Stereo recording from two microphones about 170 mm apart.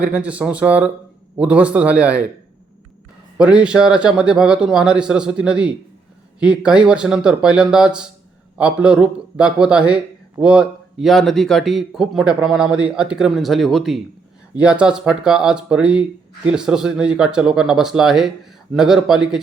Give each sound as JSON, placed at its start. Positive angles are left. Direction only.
{"t": 0.0, "sound": "speech", "side_deg": -5}
{"t": 3.3, "sound": "a man's voice", "side_deg": -5}